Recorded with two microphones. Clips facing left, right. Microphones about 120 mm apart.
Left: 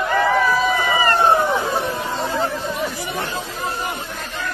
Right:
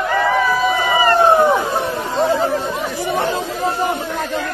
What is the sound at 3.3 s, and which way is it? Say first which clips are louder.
Chatter: right 7 dB; 90° right.